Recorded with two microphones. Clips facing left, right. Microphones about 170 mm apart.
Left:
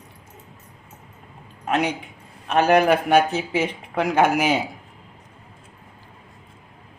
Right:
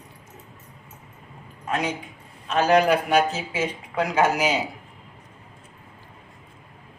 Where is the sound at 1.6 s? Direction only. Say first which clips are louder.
Left 4 dB; 65° left (ahead or behind).